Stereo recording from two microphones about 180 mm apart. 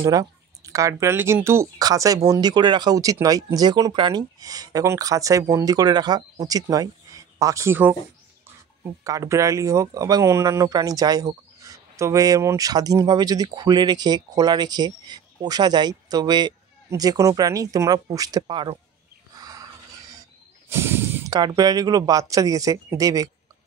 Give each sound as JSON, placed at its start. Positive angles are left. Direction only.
{"t": 0.0, "sound": "speech", "side_deg": -20}
{"t": 9.0, "sound": "speech", "side_deg": -20}
{"t": 19.3, "sound": "wild animals", "side_deg": -20}
{"t": 20.6, "sound": "speech", "side_deg": -15}